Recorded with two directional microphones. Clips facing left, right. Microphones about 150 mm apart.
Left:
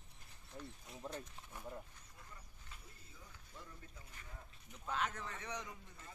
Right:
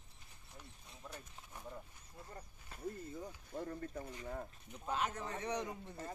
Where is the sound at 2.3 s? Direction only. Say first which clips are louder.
Right 7 dB; 50° right (ahead or behind).